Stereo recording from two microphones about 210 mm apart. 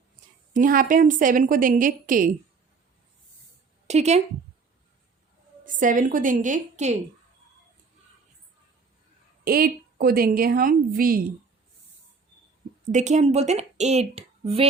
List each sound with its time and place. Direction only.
0.5 s a woman's voice: 40° right (ahead or behind)
3.8 s a woman's voice: 30° right (ahead or behind)
5.6 s a woman's voice: 40° right (ahead or behind)
9.4 s a woman's voice: 45° right (ahead or behind)
12.9 s a woman's voice: 35° right (ahead or behind)